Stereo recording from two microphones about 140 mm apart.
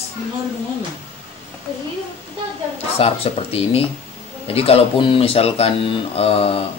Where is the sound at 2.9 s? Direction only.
45° left (ahead or behind).